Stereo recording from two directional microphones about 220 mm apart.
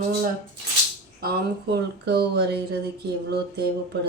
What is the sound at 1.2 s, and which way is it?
Speech, 45° right (ahead or behind).